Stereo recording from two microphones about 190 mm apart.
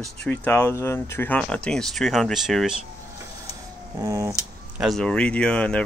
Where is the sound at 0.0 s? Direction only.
5° left (ahead or behind).